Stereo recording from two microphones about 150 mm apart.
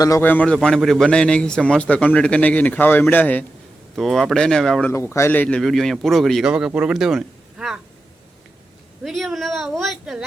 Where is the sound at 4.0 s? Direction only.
Centre (ahead or behind).